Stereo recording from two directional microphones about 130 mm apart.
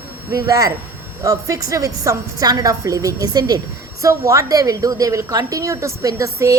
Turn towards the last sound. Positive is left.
turn(degrees=-25)  # may be behind; listen again after turning